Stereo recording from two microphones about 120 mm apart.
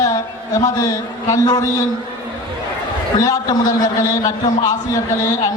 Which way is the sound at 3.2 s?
30° left (ahead or behind).